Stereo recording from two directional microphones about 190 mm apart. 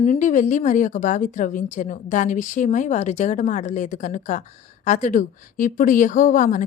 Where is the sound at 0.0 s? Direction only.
40° left (ahead or behind).